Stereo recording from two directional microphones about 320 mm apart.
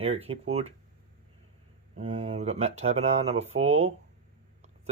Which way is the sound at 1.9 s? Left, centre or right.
Right.